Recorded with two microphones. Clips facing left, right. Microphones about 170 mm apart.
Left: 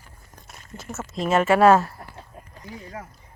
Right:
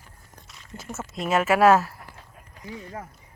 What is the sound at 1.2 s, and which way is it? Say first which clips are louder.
Speech: left 2 dB; 5° right (ahead or behind).